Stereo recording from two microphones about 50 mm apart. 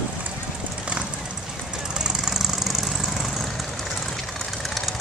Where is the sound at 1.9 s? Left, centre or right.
Centre.